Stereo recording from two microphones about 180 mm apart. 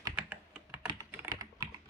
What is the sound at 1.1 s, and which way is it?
Typing, 15° right (ahead or behind).